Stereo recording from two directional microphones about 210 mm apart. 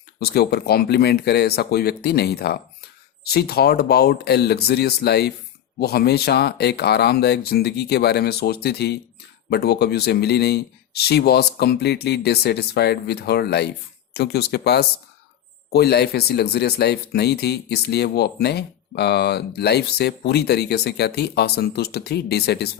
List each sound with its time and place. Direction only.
0.2 s speech: 50° left (ahead or behind)